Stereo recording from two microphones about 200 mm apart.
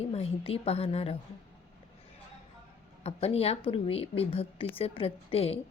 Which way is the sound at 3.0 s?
30° left (ahead or behind).